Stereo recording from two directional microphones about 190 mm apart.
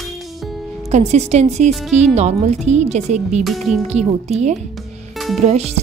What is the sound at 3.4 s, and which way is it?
Speech, centre (ahead or behind).